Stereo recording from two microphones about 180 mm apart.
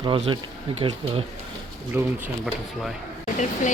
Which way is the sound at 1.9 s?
10° right (ahead or behind).